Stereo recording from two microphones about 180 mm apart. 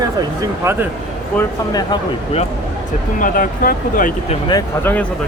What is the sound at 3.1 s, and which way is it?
Speech, 50° left (ahead or behind).